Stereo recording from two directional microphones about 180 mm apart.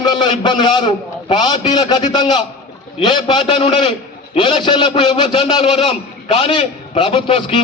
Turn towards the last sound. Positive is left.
turn(degrees=30)  # may be behind; listen again after turning